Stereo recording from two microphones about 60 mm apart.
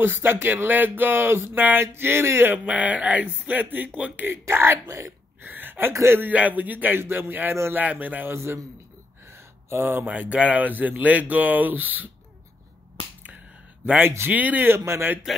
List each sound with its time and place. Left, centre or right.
0.0 s speech: right
2.5 s speech: right
4.3 s speech: right
5.4 s a sound: right
6.3 s speech: right
8.3 s speech: right
9.2 s a sound: right
10.0 s speech: right
14.3 s speech: right
14.7 s speech: right